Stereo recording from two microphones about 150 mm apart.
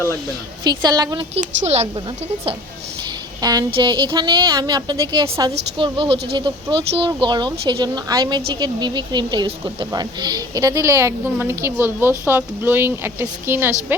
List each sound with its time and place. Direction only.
0.6 s speech: 25° right (ahead or behind)
1.4 s speech: 45° right (ahead or behind)
3.4 s a woman's voice: 25° right (ahead or behind)